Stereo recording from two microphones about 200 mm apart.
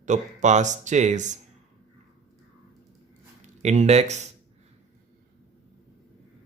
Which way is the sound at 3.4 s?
35° right (ahead or behind).